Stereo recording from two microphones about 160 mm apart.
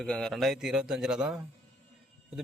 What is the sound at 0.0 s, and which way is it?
Speech, 5° left (ahead or behind).